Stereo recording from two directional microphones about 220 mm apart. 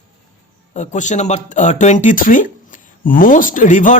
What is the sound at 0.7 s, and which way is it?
Speech, 35° left (ahead or behind).